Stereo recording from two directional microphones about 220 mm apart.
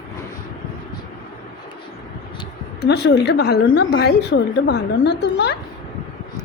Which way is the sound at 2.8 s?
50° left (ahead or behind).